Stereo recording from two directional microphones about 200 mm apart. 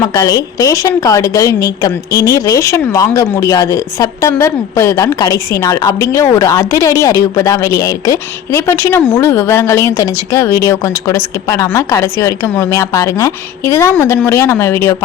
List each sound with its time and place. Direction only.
0.0 s a woman's voice: 20° left (ahead or behind)